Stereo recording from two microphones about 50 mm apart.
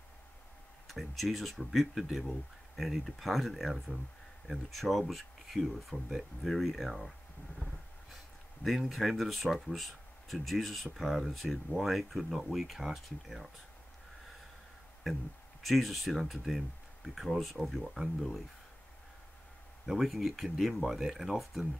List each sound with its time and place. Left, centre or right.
0.8 s speech: centre
7.5 s a sound: centre
8.6 s speech: centre
15.6 s speech: centre
19.9 s speech: centre